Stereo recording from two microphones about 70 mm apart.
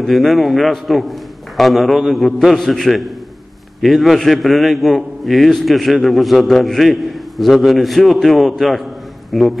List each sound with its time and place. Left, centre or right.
0.0 s a man's voice: centre